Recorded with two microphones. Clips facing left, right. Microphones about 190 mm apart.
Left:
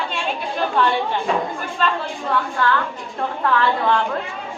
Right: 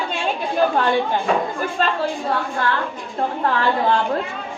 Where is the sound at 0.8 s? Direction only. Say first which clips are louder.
Right 1 dB; 45° right (ahead or behind).